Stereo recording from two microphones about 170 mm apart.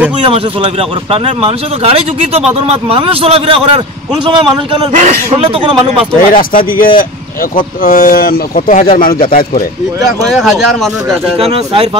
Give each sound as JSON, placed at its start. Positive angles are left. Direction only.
{"t": 0.2, "sound": "a man's voice", "side_deg": -30}
{"t": 4.9, "sound": "speech", "side_deg": -40}
{"t": 6.3, "sound": "speech", "side_deg": 55}
{"t": 10.2, "sound": "speech", "side_deg": 0}
{"t": 11.3, "sound": "speech", "side_deg": -35}